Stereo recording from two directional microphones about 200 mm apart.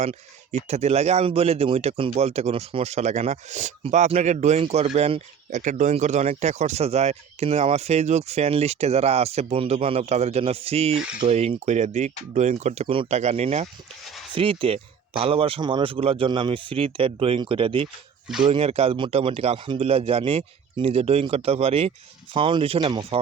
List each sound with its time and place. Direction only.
0.7 s speech: 30° right (ahead or behind)
14.0 s speech: centre (ahead or behind)
14.3 s speech: 25° right (ahead or behind)